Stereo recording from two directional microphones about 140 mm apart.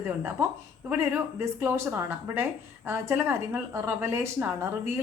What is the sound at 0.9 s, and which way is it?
Speech, 15° right (ahead or behind).